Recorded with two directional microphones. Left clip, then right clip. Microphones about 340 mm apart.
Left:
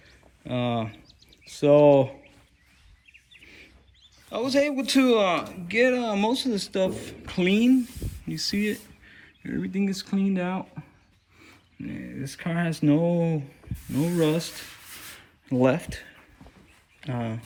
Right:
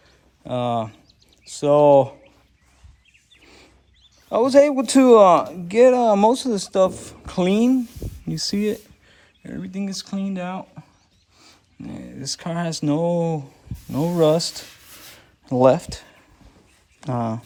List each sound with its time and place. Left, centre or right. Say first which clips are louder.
0.4 s speech: right 5 dB; centre
3.4 s bird: even; centre
4.3 s speech: right 10 dB; centre
9.4 s speech: left 2 dB; centre
11.9 s speech: right 6 dB; centre
15.4 s speech: right 7 dB; centre
17.0 s speech: right 7 dB; centre